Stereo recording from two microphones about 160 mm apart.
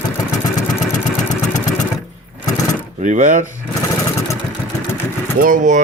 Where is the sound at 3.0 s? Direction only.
50° right (ahead or behind).